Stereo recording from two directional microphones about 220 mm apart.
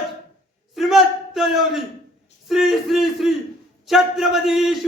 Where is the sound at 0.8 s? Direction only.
Centre (ahead or behind).